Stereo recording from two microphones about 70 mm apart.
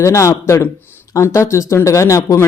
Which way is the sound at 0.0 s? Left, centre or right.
Left.